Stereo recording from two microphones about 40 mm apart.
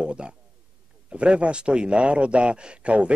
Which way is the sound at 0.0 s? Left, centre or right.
Right.